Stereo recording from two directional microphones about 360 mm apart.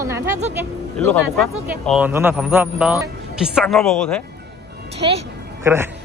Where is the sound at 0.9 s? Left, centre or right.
Centre.